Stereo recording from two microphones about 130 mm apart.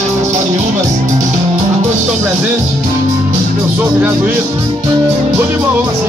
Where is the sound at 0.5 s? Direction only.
70° right (ahead or behind).